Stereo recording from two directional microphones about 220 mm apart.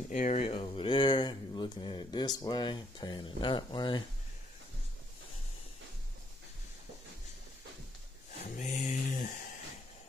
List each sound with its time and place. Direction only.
0.1 s speech: 30° left (ahead or behind)
8.5 s cattle: 35° left (ahead or behind)